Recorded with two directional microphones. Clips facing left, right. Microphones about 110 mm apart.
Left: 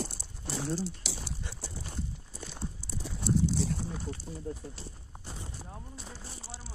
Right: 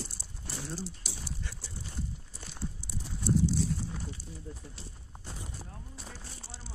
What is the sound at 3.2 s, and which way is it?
Clip-clop, 75° left (ahead or behind).